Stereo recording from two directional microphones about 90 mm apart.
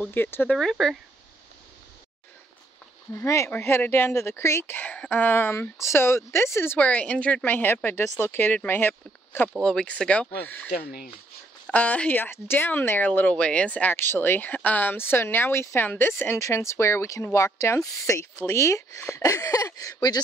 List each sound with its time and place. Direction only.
0.0 s speech: 25° left (ahead or behind)
0.6 s speech: 5° left (ahead or behind)
3.1 s speech: 30° left (ahead or behind)
6.9 s speech: 15° left (ahead or behind)
9.6 s speech: 10° left (ahead or behind)
11.7 s speech: 15° left (ahead or behind); by 20.2 s 45° left (ahead or behind)